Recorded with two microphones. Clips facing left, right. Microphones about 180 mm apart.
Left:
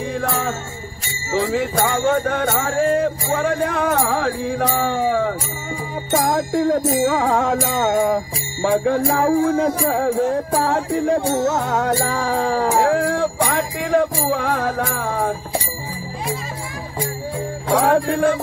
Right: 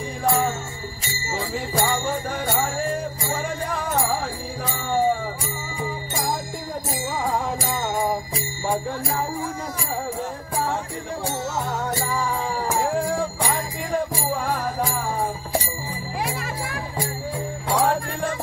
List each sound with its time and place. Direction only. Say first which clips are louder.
1.4 s music: left 5 dB; 80° left
7.5 s music: left 7 dB; 75° left (ahead or behind)
8.6 s music: left 9 dB; 90° left
17.8 s music: left 8 dB; 90° left